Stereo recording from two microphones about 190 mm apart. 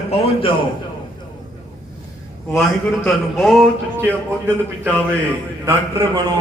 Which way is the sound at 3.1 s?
Centre (ahead or behind).